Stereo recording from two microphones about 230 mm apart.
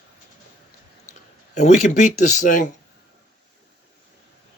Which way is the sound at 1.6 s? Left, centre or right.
Left.